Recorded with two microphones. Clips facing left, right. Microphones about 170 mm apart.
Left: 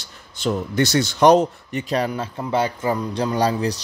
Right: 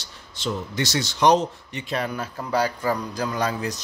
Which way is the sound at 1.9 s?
30° left (ahead or behind).